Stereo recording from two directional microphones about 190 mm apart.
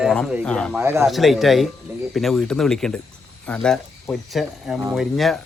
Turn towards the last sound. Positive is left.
turn(degrees=0)  # may be behind; listen again after turning